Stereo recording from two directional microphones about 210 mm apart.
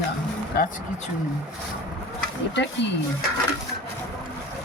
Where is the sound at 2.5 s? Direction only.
60° left (ahead or behind).